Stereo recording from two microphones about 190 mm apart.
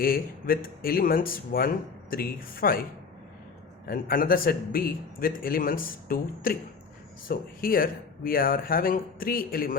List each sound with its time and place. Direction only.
0.0 s speech: 50° left (ahead or behind)
3.8 s speech: 50° left (ahead or behind)